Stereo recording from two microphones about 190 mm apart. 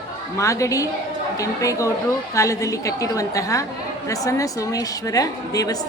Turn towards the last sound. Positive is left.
turn(degrees=20)  # may be behind; listen again after turning